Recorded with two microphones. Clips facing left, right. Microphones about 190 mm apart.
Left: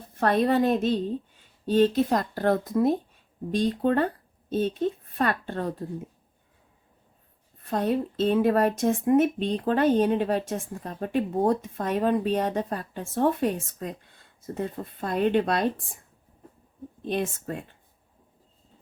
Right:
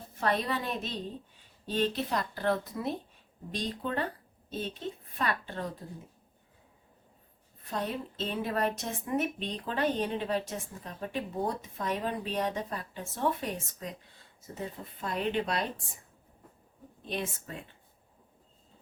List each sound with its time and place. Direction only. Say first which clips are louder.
0.2 s speech: left 9 dB; 50° left (ahead or behind)
5.1 s speech: left 7 dB; 50° left (ahead or behind)
7.6 s speech: left 9 dB; 50° left (ahead or behind)
17.1 s speech: left 8 dB; 50° left (ahead or behind)